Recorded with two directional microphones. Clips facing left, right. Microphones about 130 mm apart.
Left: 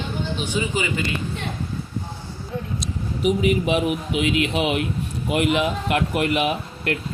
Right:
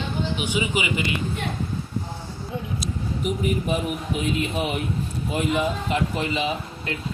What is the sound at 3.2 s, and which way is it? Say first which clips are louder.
A man's voice: left 6 dB; 85° left.